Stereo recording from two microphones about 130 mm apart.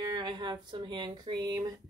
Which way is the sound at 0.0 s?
35° right (ahead or behind).